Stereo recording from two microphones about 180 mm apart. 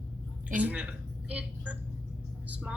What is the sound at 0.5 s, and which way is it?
A woman's voice, 10° right (ahead or behind).